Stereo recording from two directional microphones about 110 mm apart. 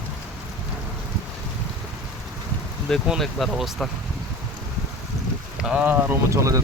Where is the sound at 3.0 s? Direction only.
Centre (ahead or behind).